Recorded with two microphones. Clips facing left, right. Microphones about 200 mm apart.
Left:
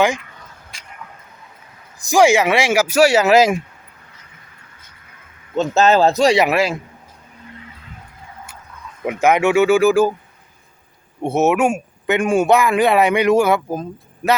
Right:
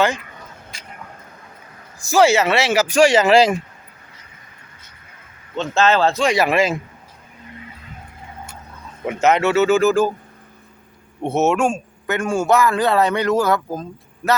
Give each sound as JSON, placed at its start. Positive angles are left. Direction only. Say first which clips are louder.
{"t": 0.7, "sound": "a sound", "louder": "right 2 dB", "side_deg": 0}
{"t": 2.0, "sound": "speech", "louder": "left 1 dB", "side_deg": 15}
{"t": 5.5, "sound": "speech", "louder": "left 3 dB", "side_deg": 40}
{"t": 6.5, "sound": "a man's voice", "louder": "even", "side_deg": 0}
{"t": 9.2, "sound": "speech", "louder": "left 2 dB", "side_deg": 15}
{"t": 11.2, "sound": "speech", "louder": "left 2 dB", "side_deg": 15}